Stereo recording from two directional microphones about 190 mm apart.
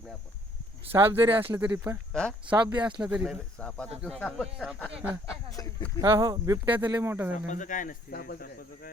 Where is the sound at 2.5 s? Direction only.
25° right (ahead or behind).